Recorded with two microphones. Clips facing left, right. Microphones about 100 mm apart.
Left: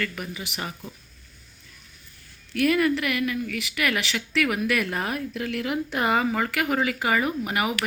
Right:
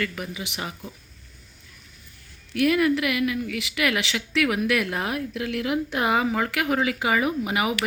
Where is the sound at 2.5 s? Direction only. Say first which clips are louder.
Right 1 dB; 10° right (ahead or behind).